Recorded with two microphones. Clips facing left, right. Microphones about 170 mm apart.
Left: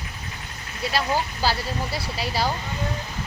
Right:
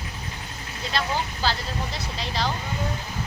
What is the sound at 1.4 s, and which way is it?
Speech, 10° left (ahead or behind).